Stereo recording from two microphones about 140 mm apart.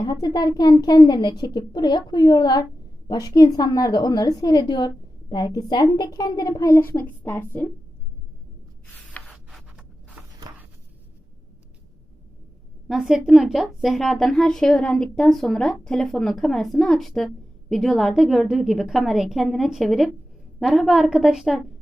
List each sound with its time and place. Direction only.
0.0 s a child's voice: 30° left (ahead or behind); by 7.7 s 15° left (ahead or behind)
9.2 s a sound: centre (ahead or behind)
12.9 s a woman's voice: centre (ahead or behind)